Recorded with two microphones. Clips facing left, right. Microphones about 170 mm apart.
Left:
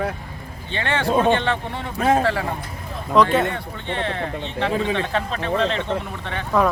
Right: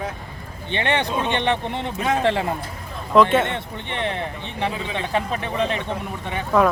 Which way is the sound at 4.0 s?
20° right (ahead or behind).